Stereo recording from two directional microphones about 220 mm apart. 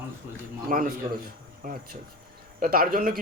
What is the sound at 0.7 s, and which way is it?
A man's voice, 40° right (ahead or behind).